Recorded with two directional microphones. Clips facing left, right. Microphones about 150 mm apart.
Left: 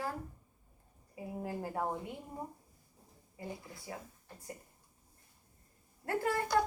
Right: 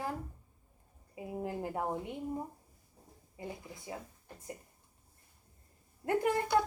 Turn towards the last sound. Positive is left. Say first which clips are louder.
# right 3 dB
turn(degrees=-20)  # may be behind; listen again after turning